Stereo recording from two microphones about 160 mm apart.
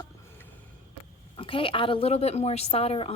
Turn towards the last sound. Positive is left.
turn(degrees=40)  # may be behind; listen again after turning